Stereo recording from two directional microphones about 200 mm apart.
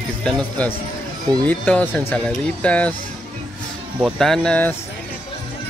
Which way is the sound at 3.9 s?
Centre (ahead or behind).